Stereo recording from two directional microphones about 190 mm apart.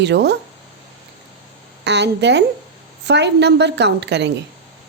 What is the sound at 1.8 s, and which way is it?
A woman's voice, 65° right (ahead or behind).